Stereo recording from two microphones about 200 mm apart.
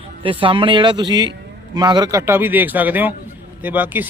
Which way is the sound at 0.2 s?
25° right (ahead or behind).